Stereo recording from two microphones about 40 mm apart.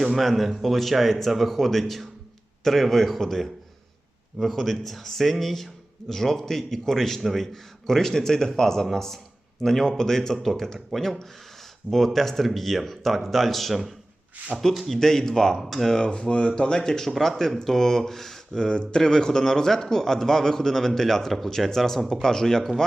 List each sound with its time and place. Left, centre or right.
0.0 s speech: centre
10.3 s speech: centre
14.9 s speech: centre
15.6 s speech: centre
15.9 s speech: left
18.6 s speech: left